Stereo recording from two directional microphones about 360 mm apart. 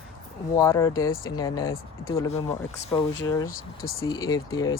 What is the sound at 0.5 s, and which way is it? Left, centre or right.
Speech, centre.